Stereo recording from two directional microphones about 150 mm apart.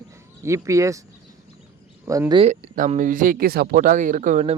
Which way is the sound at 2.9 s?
60° right (ahead or behind).